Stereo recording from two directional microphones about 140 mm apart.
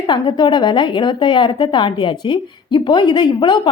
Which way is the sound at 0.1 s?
35° left (ahead or behind).